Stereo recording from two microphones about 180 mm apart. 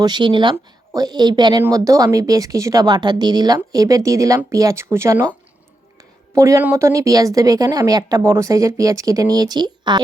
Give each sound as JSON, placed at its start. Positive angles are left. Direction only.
{"t": 0.0, "sound": "speech", "side_deg": -25}